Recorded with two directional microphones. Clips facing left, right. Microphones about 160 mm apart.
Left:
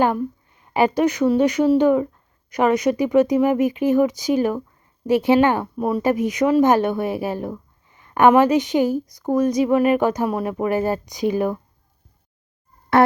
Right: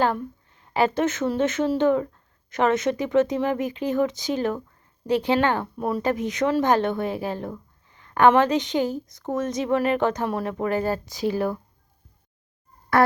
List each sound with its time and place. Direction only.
0.0 s speech: 15° left (ahead or behind)
6.0 s a woman's voice: 15° left (ahead or behind)
9.2 s speech: 5° left (ahead or behind)